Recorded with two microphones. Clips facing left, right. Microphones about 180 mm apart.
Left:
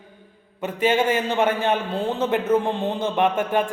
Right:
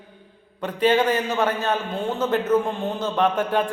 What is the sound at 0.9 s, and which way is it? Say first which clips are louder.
A man's voice: even; 25° left (ahead or behind).